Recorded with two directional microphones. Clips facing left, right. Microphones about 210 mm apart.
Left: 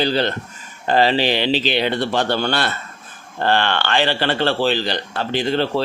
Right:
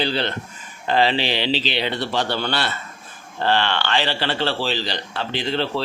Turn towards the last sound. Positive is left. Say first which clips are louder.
# left 4 dB
turn(degrees=45)  # may be behind; listen again after turning